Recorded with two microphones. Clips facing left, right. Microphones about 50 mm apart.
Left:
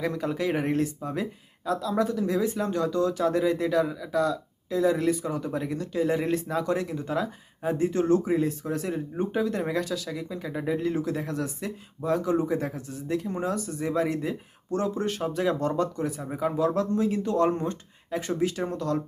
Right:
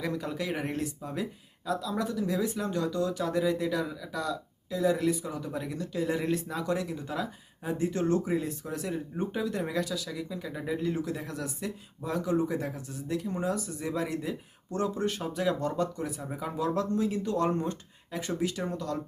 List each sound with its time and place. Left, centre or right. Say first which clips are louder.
0.0 s speech: left 5 dB; left
16.2 s speech: left 7 dB; centre
16.6 s speech: left 3 dB; left